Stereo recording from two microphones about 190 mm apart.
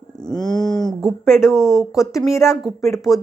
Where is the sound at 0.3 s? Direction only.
20° left (ahead or behind).